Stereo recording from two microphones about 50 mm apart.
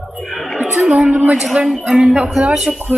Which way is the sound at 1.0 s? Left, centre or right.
Right.